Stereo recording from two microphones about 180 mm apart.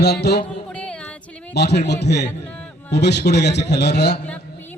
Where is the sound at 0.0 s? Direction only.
65° left (ahead or behind).